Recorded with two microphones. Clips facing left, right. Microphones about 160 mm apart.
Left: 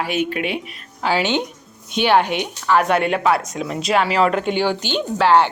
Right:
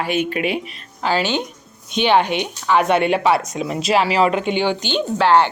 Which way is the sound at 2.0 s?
5° left (ahead or behind).